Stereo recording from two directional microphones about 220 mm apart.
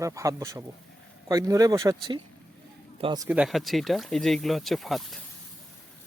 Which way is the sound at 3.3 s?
5° right (ahead or behind).